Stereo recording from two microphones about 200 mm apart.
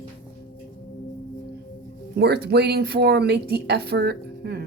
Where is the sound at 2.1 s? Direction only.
55° right (ahead or behind).